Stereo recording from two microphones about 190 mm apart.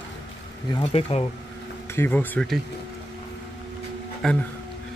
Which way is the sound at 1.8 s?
10° left (ahead or behind).